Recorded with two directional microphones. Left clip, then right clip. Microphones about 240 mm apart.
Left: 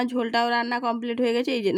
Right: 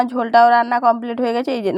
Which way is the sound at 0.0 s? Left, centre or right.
Centre.